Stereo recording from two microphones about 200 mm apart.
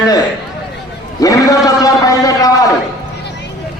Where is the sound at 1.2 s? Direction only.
15° left (ahead or behind).